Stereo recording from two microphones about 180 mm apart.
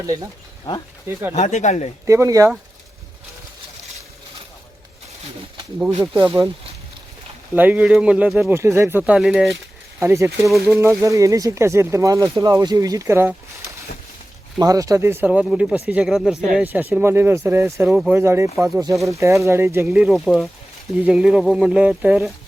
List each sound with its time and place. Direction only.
0.0 s speech: 20° right (ahead or behind)
1.3 s speech: 40° left (ahead or behind)
2.0 s speech: 15° right (ahead or behind)
5.9 s speech: 25° right (ahead or behind)
7.5 s speech: 10° right (ahead or behind)
10.0 s speech: 15° right (ahead or behind)
14.6 s speech: 20° right (ahead or behind)